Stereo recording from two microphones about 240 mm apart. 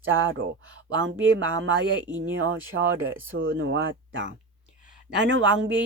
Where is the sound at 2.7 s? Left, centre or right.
Right.